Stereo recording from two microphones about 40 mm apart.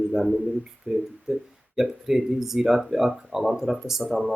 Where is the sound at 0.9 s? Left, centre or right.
Centre.